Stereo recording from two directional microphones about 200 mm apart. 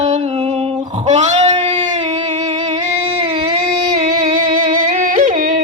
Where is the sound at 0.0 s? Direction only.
35° right (ahead or behind).